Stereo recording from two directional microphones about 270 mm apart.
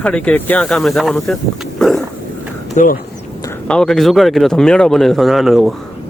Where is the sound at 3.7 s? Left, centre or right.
Centre.